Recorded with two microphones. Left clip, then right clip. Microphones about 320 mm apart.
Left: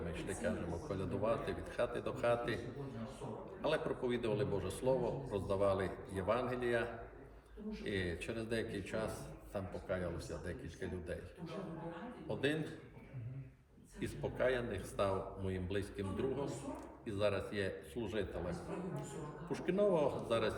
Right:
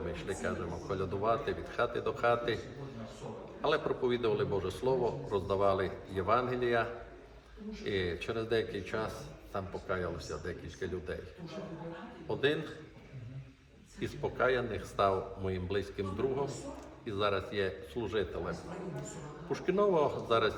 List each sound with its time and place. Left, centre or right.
0.2 s a man's voice: centre
3.6 s a man's voice: centre
7.9 s a man's voice: centre
14.0 s a man's voice: centre
17.1 s a man's voice: centre
19.5 s a man's voice: centre